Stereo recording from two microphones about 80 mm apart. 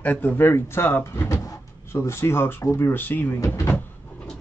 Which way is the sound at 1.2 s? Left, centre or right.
Left.